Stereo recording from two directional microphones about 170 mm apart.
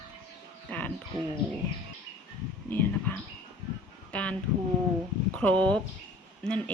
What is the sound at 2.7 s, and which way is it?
Speech, 10° left (ahead or behind).